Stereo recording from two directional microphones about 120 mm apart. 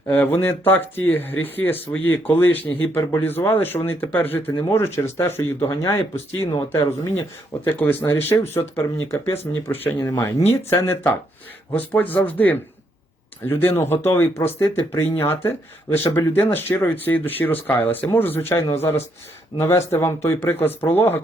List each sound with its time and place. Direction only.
0.1 s speech: 15° left (ahead or behind)